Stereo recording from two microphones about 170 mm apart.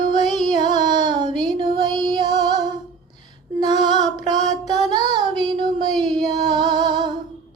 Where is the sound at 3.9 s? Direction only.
40° left (ahead or behind).